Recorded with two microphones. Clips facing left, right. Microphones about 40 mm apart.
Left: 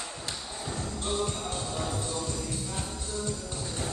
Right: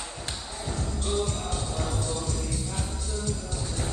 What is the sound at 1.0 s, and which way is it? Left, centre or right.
Music, left.